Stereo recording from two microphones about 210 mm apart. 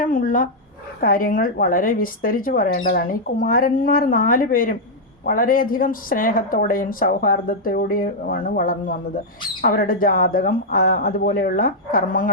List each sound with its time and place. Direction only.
0.0 s dog: 40° left (ahead or behind)
1.0 s a woman's voice: 40° left (ahead or behind)